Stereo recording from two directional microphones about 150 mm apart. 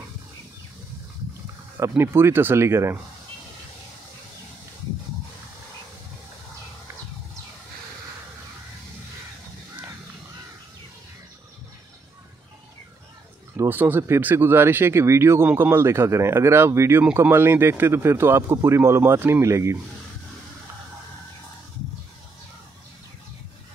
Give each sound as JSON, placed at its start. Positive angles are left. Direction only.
{"t": 1.8, "sound": "speech", "side_deg": -15}
{"t": 13.6, "sound": "speech", "side_deg": -15}